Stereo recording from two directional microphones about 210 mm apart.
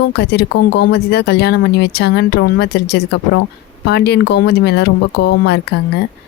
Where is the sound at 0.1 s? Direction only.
50° left (ahead or behind).